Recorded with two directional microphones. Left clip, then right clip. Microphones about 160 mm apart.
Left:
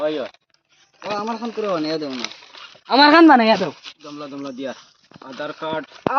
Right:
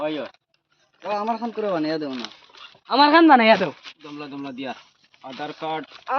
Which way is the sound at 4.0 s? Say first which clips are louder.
Left 3 dB; centre (ahead or behind).